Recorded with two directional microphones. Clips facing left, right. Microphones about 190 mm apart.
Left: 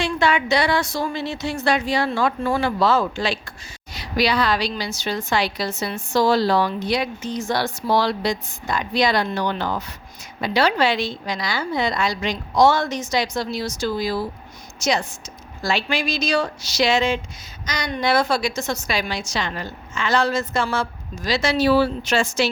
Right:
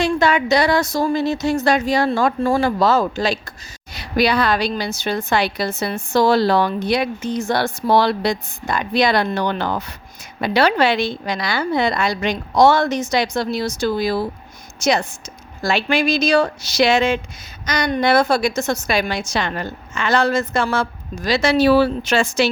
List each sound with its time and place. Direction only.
0.0 s a woman's voice: 40° right (ahead or behind)
3.9 s a woman's voice: 55° right (ahead or behind)